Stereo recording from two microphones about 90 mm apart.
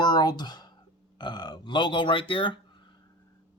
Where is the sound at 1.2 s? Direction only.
55° left (ahead or behind); by 2.6 s 70° left (ahead or behind).